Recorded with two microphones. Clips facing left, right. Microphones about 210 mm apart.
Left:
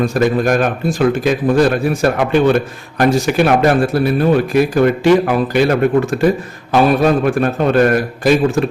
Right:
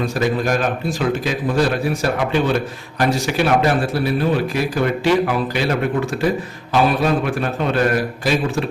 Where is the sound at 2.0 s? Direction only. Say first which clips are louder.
Left 7 dB; 55° left (ahead or behind).